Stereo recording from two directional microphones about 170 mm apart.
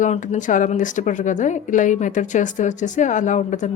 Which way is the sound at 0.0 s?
45° left (ahead or behind).